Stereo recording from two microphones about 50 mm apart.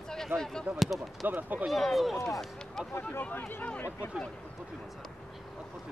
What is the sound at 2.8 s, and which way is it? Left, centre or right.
Speech, centre.